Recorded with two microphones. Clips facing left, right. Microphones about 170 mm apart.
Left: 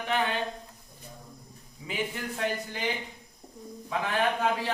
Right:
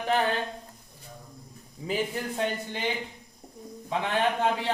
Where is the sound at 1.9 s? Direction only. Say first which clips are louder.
Right 4 dB; 30° right (ahead or behind).